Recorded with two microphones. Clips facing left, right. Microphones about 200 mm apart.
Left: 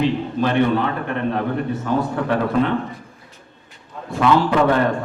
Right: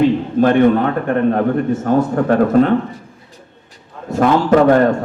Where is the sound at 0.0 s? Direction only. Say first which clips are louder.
Right 7 dB; 50° right (ahead or behind).